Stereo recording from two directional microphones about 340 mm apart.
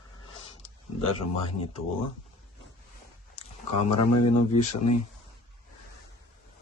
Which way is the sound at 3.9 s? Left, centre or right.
Left.